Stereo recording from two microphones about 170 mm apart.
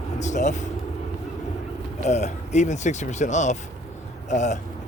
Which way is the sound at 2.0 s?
40° left (ahead or behind).